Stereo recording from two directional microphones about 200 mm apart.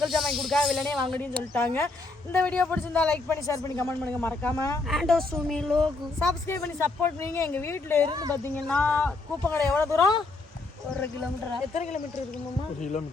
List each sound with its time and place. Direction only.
0.0 s a man's voice: centre (ahead or behind)
4.9 s speech: centre (ahead or behind)
6.5 s a man's voice: 15° left (ahead or behind)
8.0 s speech: 20° right (ahead or behind)
8.4 s a man's voice: 5° left (ahead or behind)
11.7 s speech: 35° left (ahead or behind)